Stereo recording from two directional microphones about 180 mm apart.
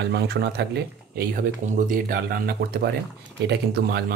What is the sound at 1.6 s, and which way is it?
Speech, 50° right (ahead or behind).